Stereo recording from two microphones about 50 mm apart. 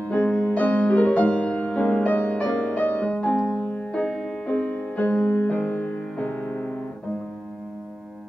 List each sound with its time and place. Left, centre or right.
0.0 s music: left
3.9 s music: centre
4.5 s music: left